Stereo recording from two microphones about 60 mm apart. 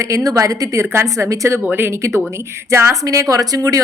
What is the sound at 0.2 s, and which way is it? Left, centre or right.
Speech, right.